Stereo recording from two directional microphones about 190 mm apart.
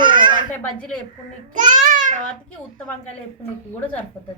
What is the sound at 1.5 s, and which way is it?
Babbling, 40° right (ahead or behind).